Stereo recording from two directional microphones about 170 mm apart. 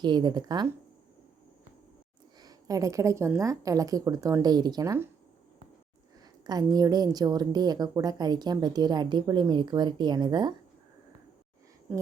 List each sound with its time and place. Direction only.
0.0 s a woman's voice: 25° right (ahead or behind)
2.4 s a woman's voice: 20° right (ahead or behind)
6.4 s a woman's voice: 25° right (ahead or behind)